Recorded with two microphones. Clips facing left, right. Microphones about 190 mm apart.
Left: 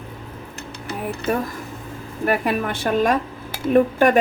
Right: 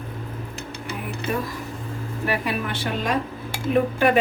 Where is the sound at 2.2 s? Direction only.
50° left (ahead or behind).